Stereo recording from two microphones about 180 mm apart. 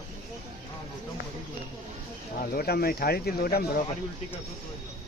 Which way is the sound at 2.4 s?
55° left (ahead or behind).